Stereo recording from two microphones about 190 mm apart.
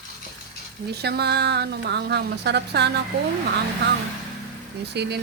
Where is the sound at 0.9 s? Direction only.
60° right (ahead or behind).